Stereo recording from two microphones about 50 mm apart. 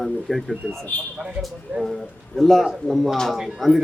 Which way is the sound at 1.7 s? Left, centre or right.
Right.